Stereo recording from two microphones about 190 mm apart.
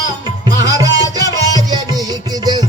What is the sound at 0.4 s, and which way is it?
Music, 20° right (ahead or behind).